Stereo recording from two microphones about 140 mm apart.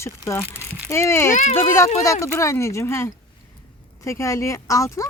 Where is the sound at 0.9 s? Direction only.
20° left (ahead or behind).